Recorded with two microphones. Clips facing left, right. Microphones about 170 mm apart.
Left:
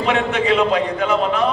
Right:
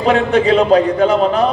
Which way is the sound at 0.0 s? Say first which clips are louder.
Right 6 dB; 35° right (ahead or behind).